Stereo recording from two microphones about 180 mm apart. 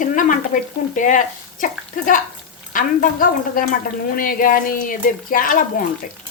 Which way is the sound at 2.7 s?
50° left (ahead or behind).